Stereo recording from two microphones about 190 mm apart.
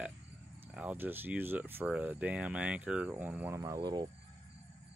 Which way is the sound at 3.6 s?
20° right (ahead or behind).